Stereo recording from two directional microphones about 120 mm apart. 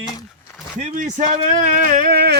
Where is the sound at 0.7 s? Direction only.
90° right.